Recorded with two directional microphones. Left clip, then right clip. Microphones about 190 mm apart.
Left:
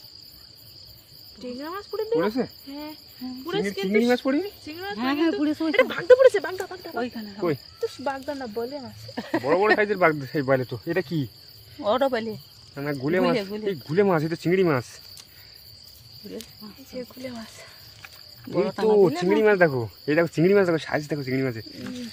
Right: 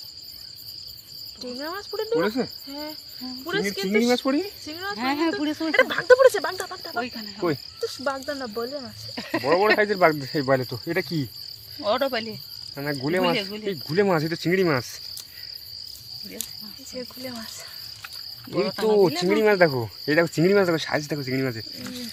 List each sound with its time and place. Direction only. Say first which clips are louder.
1.5 s speech: even; 25° left (ahead or behind)
2.1 s speech: even; 5° right (ahead or behind)
2.6 s speech: right 3 dB; 25° left (ahead or behind)
3.6 s speech: left 1 dB; 5° right (ahead or behind)
3.9 s cricket: even; 10° left (ahead or behind)
4.9 s speech: even; 30° left (ahead or behind)
9.7 s speech: right 1 dB; centre (ahead or behind)
11.8 s cricket: left 1 dB; 35° left (ahead or behind)
12.7 s cricket: even; 10° left (ahead or behind)
13.3 s cricket: even; 30° left (ahead or behind)
13.7 s cricket: even; 10° left (ahead or behind)
16.9 s cricket: even; 45° left (ahead or behind)
18.5 s cricket: left 1 dB; 35° left (ahead or behind)
19.2 s speech: even; centre (ahead or behind)